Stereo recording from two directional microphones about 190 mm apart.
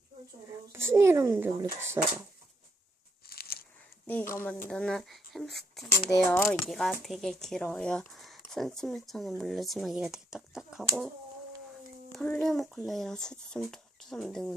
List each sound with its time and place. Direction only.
0.7 s speech: 15° right (ahead or behind)
3.2 s a sound: 55° left (ahead or behind)
4.0 s speech: 10° left (ahead or behind)
5.9 s speech: 15° left (ahead or behind); by 10.8 s centre (ahead or behind)
12.1 s speech: centre (ahead or behind)